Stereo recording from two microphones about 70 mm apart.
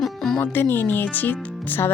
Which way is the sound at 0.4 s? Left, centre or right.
Left.